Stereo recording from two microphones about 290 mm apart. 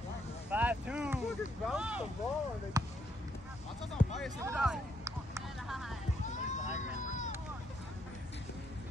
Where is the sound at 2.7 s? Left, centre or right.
Centre.